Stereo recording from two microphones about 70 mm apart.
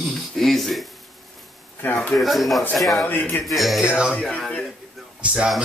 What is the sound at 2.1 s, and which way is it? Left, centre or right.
Speech, centre.